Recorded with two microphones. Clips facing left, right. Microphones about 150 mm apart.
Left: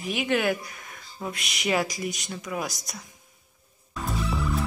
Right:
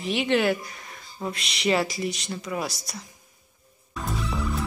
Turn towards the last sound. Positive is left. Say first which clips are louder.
# left 1 dB
turn(degrees=0)  # may be behind; listen again after turning